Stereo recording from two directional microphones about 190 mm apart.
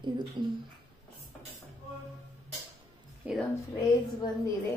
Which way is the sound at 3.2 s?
5° right (ahead or behind).